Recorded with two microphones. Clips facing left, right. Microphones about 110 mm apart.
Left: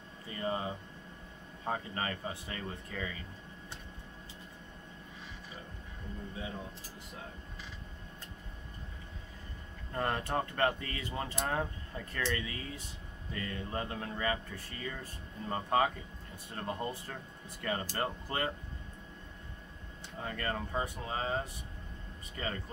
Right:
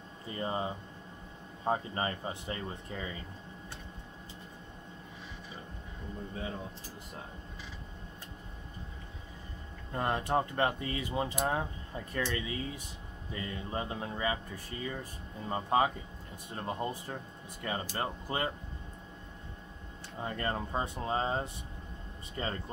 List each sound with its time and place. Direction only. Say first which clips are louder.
0.3 s speech: right 1 dB; 25° right (ahead or behind)
9.9 s speech: right 3 dB; 15° right (ahead or behind)
20.2 s speech: right 2 dB; 25° right (ahead or behind)